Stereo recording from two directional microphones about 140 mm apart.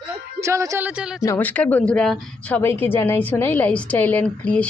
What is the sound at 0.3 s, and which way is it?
Speech, 20° right (ahead or behind).